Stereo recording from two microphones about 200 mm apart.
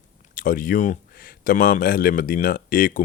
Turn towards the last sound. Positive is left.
turn(degrees=45)  # may be behind; listen again after turning